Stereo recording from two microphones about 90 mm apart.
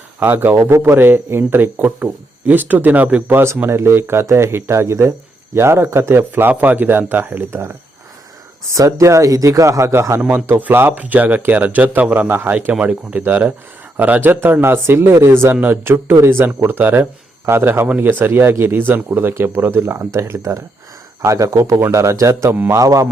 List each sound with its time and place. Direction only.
0.2 s a man's voice: 20° right (ahead or behind)
8.7 s a man's voice: 35° right (ahead or behind)